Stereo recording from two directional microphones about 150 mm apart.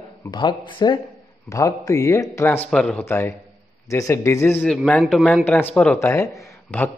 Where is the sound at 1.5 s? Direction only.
20° left (ahead or behind).